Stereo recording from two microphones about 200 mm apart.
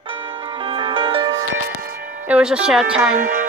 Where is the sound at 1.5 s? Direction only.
50° right (ahead or behind).